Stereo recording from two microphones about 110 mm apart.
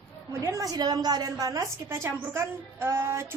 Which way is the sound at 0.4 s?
30° right (ahead or behind).